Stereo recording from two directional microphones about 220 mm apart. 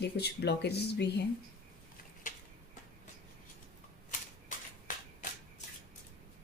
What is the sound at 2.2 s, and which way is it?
Tick-tock, 35° left (ahead or behind).